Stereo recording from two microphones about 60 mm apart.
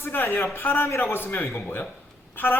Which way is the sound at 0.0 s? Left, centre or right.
Left.